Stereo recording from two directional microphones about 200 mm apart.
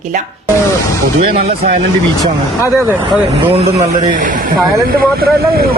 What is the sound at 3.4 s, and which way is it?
Speech, 30° right (ahead or behind).